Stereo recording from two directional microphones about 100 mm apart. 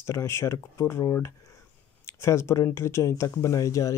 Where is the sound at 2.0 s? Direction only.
25° left (ahead or behind).